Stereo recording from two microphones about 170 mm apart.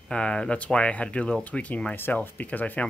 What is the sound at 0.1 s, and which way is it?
Speech, 5° left (ahead or behind).